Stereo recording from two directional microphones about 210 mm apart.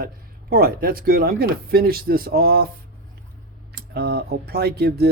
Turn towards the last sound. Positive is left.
turn(degrees=-50)  # may be behind; listen again after turning